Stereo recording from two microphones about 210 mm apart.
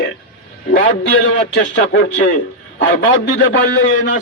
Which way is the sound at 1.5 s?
60° left (ahead or behind).